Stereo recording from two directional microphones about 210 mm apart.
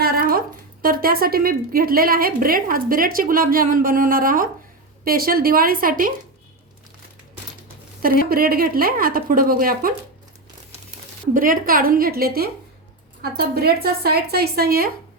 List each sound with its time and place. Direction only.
0.0 s a woman's voice: 45° right (ahead or behind)
8.3 s a woman's voice: 45° right (ahead or behind)
11.3 s a woman's voice: 40° right (ahead or behind)